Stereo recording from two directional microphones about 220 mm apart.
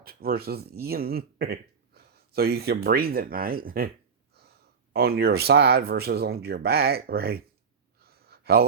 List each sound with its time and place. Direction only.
0.0 s speech: 45° right (ahead or behind)
4.9 s speech: 45° right (ahead or behind)
8.0 s gasp: 45° right (ahead or behind)